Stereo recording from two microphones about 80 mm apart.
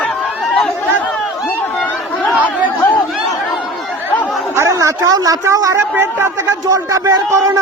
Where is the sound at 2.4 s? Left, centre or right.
Left.